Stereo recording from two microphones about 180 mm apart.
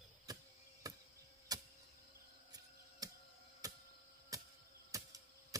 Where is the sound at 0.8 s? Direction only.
20° right (ahead or behind).